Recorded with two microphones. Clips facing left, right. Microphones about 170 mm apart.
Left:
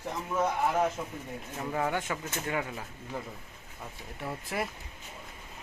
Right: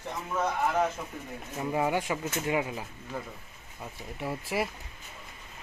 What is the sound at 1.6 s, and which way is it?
Speech, 15° right (ahead or behind).